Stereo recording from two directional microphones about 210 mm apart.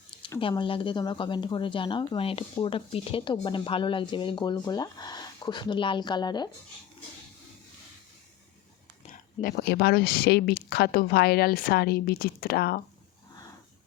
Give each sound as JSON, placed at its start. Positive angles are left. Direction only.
{"t": 0.2, "sound": "speech", "side_deg": 25}
{"t": 9.0, "sound": "speech", "side_deg": 45}